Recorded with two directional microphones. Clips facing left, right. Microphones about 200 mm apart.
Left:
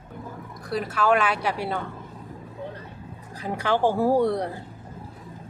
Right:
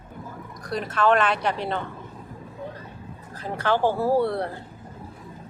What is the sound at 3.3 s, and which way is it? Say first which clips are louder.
A woman's voice: even; 15° left (ahead or behind).